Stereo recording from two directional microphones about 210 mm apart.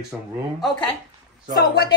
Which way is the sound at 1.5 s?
50° left (ahead or behind).